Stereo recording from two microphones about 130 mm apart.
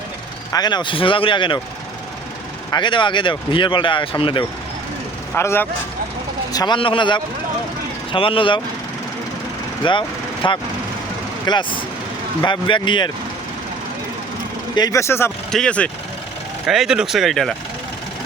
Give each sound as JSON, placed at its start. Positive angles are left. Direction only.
{"t": 0.5, "sound": "speech", "side_deg": 35}
{"t": 2.6, "sound": "speech", "side_deg": 35}
{"t": 5.3, "sound": "speech", "side_deg": 15}
{"t": 6.5, "sound": "speech", "side_deg": 30}
{"t": 6.7, "sound": "speech", "side_deg": 40}
{"t": 9.8, "sound": "speech", "side_deg": 40}
{"t": 14.8, "sound": "speech", "side_deg": 25}
{"t": 15.5, "sound": "speech", "side_deg": 10}
{"t": 16.6, "sound": "speech", "side_deg": -5}